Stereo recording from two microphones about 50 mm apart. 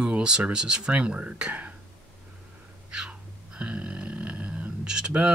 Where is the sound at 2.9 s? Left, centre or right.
Centre.